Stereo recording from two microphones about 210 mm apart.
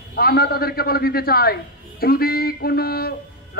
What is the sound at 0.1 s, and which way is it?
A man's voice, 45° left (ahead or behind).